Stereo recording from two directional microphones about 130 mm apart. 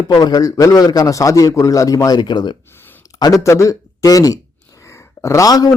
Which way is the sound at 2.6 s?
15° left (ahead or behind).